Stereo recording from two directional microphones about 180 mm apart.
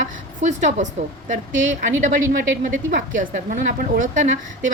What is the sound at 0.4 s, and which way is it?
Speech, 45° right (ahead or behind).